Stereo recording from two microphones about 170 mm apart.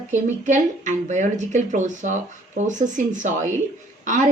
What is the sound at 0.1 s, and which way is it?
A woman's voice, 45° right (ahead or behind).